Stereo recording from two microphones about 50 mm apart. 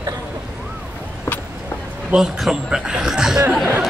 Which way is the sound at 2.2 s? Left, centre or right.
Centre.